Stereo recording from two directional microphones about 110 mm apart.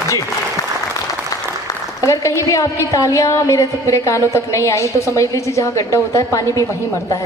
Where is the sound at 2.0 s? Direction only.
30° left (ahead or behind).